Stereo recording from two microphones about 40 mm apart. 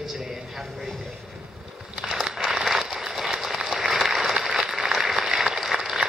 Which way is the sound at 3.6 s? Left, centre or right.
Centre.